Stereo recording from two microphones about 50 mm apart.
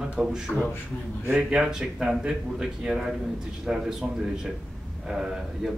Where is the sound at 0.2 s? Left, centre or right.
Centre.